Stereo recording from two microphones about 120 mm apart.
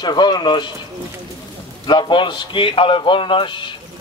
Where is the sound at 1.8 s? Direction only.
40° left (ahead or behind).